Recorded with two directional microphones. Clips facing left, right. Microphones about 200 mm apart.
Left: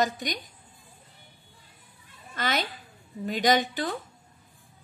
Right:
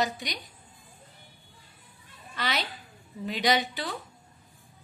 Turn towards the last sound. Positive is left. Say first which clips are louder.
# left 3 dB
turn(degrees=45)  # may be behind; listen again after turning